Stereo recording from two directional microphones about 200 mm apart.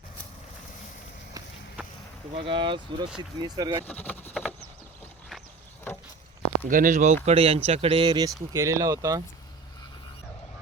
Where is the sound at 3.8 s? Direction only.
10° left (ahead or behind).